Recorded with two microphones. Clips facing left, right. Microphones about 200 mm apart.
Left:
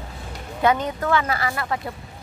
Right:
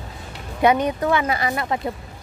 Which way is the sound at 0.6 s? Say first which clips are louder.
Right 3 dB; 15° right (ahead or behind).